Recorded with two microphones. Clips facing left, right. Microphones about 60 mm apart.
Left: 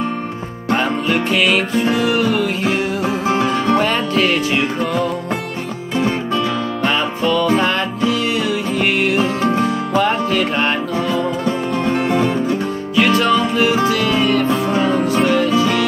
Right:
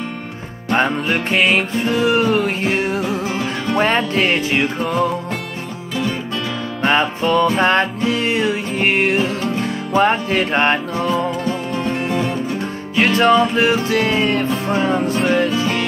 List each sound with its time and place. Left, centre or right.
0.7 s music: right
3.0 s music: left
3.7 s music: right
6.9 s music: right
11.7 s music: left
12.9 s music: right